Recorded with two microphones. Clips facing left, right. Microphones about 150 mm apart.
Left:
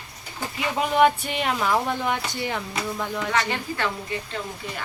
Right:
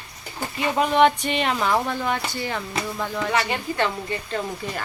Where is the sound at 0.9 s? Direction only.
5° left (ahead or behind).